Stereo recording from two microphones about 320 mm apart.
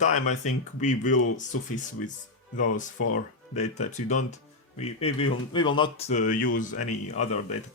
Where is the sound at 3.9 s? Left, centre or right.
Left.